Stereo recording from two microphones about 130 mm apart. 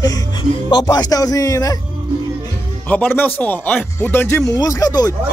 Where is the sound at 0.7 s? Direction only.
30° left (ahead or behind).